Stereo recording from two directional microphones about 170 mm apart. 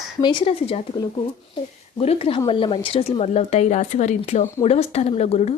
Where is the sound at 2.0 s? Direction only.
35° left (ahead or behind).